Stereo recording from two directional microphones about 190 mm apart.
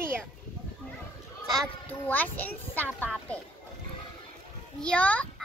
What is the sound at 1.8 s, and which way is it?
A child's voice, 10° left (ahead or behind).